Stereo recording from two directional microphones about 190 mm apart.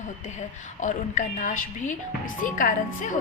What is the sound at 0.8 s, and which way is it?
Speech, 40° left (ahead or behind).